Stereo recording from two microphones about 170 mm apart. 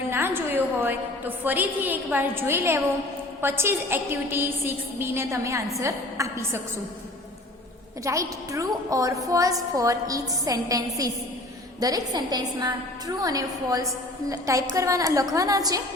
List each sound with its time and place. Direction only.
0.1 s a woman's voice: 15° right (ahead or behind)
8.0 s a woman's voice: 20° right (ahead or behind)